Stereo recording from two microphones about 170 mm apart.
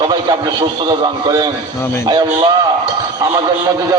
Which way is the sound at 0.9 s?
25° right (ahead or behind).